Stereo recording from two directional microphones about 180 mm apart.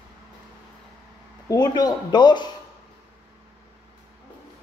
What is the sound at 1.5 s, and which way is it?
Speech, 20° left (ahead or behind).